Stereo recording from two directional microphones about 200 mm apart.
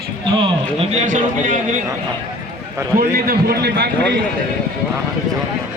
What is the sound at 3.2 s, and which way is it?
Speech, 50° right (ahead or behind).